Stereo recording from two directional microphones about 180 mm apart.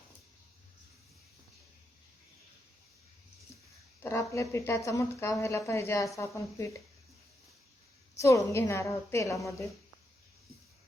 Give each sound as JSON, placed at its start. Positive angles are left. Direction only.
{"t": 4.0, "sound": "a woman's voice", "side_deg": 15}
{"t": 8.2, "sound": "a woman's voice", "side_deg": 15}